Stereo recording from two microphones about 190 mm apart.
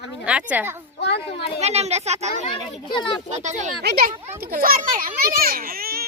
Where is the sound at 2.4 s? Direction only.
25° left (ahead or behind).